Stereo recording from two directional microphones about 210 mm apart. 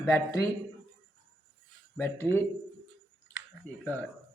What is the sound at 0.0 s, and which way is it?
Speech, 15° left (ahead or behind).